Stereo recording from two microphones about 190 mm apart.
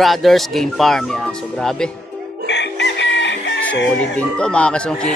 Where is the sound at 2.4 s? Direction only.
65° left (ahead or behind).